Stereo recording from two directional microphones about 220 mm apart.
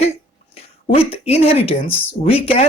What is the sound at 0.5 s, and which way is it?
Speech, 25° left (ahead or behind).